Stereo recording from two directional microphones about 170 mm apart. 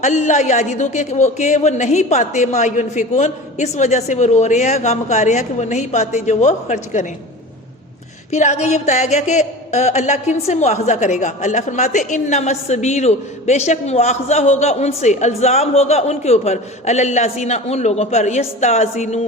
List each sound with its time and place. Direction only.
0.0 s speech: 45° left (ahead or behind)
8.3 s speech: 40° left (ahead or behind)